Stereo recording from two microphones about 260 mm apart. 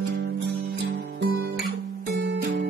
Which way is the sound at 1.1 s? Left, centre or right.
Right.